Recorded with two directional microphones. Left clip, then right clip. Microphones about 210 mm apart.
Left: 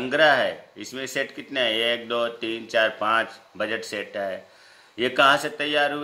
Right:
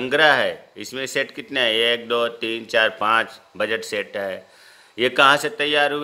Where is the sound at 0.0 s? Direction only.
50° right (ahead or behind).